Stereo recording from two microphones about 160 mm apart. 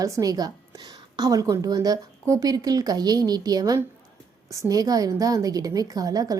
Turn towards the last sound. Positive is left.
turn(degrees=-25)  # may be behind; listen again after turning